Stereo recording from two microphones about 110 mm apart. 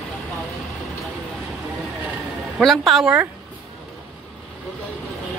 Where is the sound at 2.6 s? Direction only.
Centre (ahead or behind).